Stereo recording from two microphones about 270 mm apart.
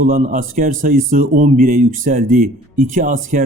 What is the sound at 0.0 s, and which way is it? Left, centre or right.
Speech, right.